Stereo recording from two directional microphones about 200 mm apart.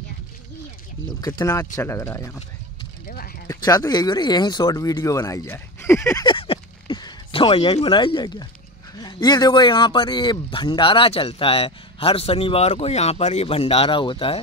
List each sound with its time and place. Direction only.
1.2 s speech: 15° left (ahead or behind)
3.1 s speech: 45° left (ahead or behind)
3.4 s speech: 15° left (ahead or behind)